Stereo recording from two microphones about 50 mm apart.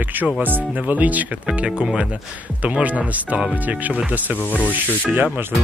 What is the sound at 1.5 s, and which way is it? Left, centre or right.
Speech, centre.